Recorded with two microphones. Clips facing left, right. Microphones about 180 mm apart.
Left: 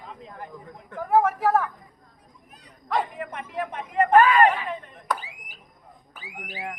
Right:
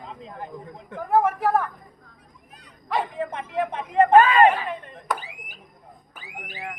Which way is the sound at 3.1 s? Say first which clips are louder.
Right 5 dB; 25° right (ahead or behind).